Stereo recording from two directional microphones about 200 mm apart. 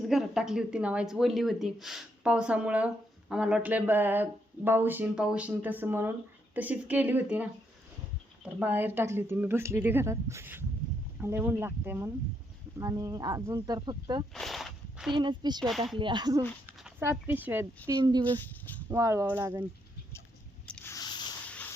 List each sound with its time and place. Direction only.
0.1 s speech: centre (ahead or behind)
8.5 s speech: 10° right (ahead or behind)
14.3 s a sound: centre (ahead or behind)
15.1 s speech: 25° right (ahead or behind)
18.3 s speech: 10° left (ahead or behind)
18.9 s speech: 15° right (ahead or behind)
20.7 s squish: 5° left (ahead or behind)
20.9 s a sound: 20° left (ahead or behind)
21.5 s a sound: 10° left (ahead or behind)